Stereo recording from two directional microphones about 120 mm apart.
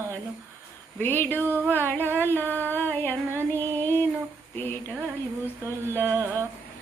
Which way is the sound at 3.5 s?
15° left (ahead or behind).